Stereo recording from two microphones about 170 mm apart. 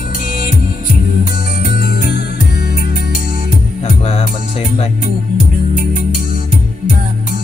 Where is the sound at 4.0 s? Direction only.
35° left (ahead or behind).